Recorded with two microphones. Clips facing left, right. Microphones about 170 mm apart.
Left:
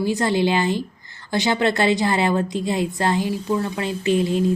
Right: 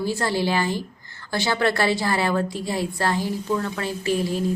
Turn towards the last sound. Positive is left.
turn(degrees=20)  # may be behind; listen again after turning